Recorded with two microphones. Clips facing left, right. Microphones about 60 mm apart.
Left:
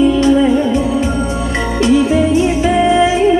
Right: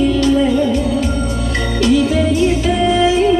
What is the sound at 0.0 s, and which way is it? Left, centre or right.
Music, left.